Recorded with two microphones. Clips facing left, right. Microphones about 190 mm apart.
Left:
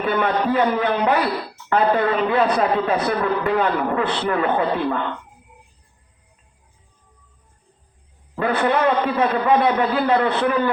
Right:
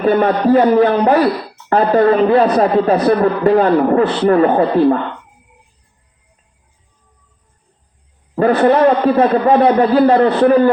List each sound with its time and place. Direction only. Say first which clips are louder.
0.0 s speech: right 7 dB; 40° right (ahead or behind)
8.4 s speech: right 8 dB; 40° right (ahead or behind)